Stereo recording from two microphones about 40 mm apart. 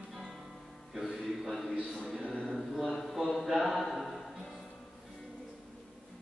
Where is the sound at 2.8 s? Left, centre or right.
Centre.